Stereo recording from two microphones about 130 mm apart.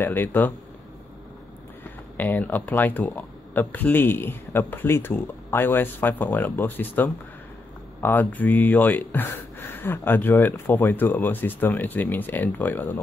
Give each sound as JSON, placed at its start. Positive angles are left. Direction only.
{"t": 0.0, "sound": "speech", "side_deg": 15}
{"t": 2.1, "sound": "speech", "side_deg": 15}